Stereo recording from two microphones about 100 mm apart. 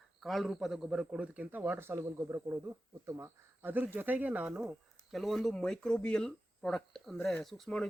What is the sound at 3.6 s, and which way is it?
A man's voice, 20° right (ahead or behind).